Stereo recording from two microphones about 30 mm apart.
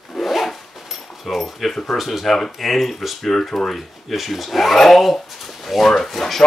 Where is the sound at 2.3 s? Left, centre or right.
Centre.